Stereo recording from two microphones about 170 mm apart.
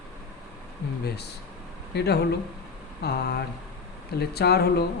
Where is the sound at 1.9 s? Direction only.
70° left (ahead or behind).